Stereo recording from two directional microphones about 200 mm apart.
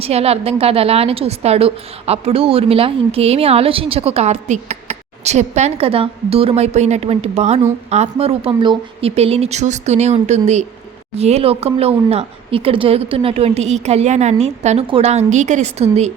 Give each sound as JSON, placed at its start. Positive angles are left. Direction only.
{"t": 0.0, "sound": "a woman's voice", "side_deg": -30}